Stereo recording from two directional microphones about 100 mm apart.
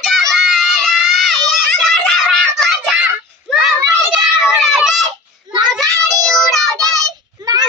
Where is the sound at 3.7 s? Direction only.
35° right (ahead or behind).